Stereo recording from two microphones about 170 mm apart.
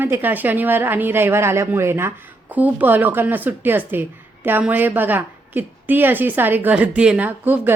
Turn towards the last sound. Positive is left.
turn(degrees=-10)  # may be behind; listen again after turning